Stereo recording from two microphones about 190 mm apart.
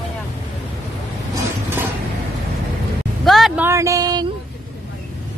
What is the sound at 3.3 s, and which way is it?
Speech, centre (ahead or behind).